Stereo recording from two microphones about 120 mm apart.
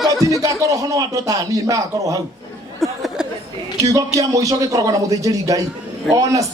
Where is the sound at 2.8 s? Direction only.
Centre (ahead or behind).